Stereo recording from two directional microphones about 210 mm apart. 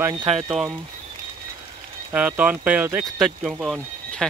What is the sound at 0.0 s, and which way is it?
Speech, 20° right (ahead or behind).